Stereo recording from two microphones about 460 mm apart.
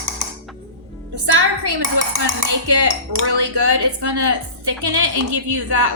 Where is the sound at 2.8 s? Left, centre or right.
Right.